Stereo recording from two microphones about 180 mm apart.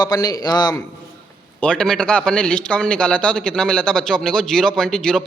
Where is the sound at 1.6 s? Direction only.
5° left (ahead or behind).